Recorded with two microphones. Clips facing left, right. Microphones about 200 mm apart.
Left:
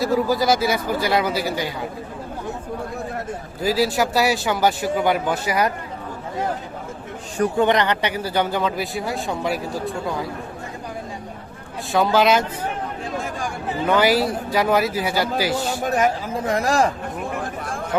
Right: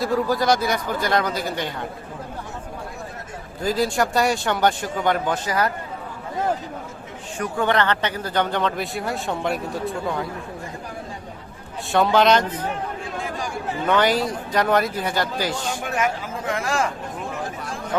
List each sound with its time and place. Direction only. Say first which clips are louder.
0.0 s speech: left 2 dB; 5° left (ahead or behind)
3.6 s speech: left 2 dB; 5° left (ahead or behind)
7.5 s speech: left 1 dB; 20° left (ahead or behind); by 10.2 s centre (ahead or behind)
11.9 s speech: even; centre (ahead or behind)
13.8 s speech: left 2 dB; 5° left (ahead or behind)
15.7 s speech: left 4 dB; 35° left (ahead or behind)